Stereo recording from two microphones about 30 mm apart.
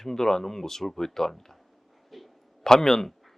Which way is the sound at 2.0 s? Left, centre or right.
Centre.